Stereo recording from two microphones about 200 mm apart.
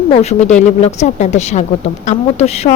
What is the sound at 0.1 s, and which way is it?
Speech, 30° left (ahead or behind).